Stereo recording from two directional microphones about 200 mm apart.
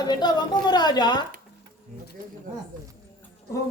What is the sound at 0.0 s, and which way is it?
A woman's voice, 20° left (ahead or behind).